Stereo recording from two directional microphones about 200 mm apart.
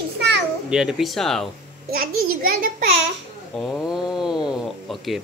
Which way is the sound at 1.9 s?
45° right (ahead or behind).